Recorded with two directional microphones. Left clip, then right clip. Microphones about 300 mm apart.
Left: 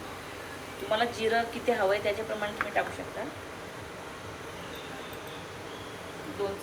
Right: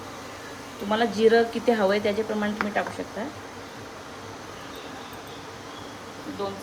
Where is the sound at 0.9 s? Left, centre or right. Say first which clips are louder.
Right 7 dB; right.